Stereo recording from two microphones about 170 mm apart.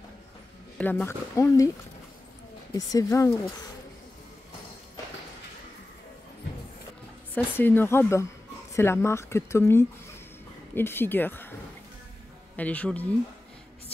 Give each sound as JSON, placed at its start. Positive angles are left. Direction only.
{"t": 0.7, "sound": "speech", "side_deg": 10}
{"t": 2.7, "sound": "speech", "side_deg": 20}
{"t": 7.3, "sound": "speech", "side_deg": 10}
{"t": 12.5, "sound": "speech", "side_deg": 10}